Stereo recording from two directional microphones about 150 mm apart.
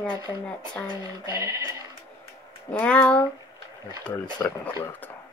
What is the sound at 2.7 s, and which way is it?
Speech, 10° left (ahead or behind).